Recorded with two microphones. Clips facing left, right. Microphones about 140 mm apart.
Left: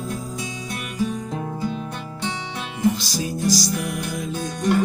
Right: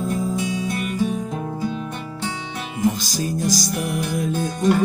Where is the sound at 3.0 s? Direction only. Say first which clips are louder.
Right 1 dB; 45° right (ahead or behind).